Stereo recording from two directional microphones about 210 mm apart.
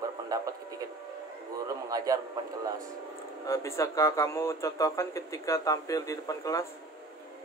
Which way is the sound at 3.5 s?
15° left (ahead or behind).